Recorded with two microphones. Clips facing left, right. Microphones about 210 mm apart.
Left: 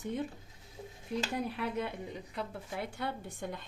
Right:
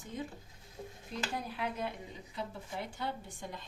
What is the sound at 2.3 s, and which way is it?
Speech, 60° left (ahead or behind).